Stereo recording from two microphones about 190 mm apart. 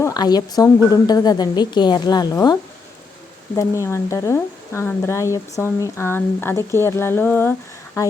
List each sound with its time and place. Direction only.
0.0 s a woman's voice: 20° left (ahead or behind)